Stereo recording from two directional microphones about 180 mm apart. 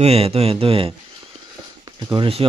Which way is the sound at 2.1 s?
30° right (ahead or behind).